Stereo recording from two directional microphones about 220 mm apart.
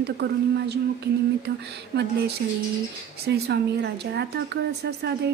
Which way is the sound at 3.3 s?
50° right (ahead or behind).